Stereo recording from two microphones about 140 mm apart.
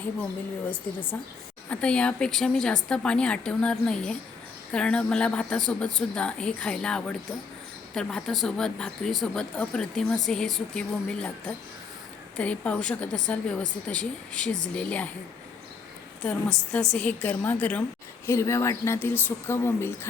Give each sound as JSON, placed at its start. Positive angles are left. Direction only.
{"t": 1.1, "sound": "a woman's voice", "side_deg": 15}
{"t": 16.2, "sound": "a woman's voice", "side_deg": 5}
{"t": 18.3, "sound": "a woman's voice", "side_deg": 20}